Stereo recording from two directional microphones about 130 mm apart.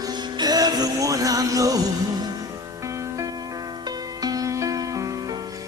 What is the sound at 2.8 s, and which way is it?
Music, 25° right (ahead or behind).